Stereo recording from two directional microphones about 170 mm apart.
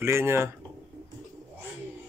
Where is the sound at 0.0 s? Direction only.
15° right (ahead or behind).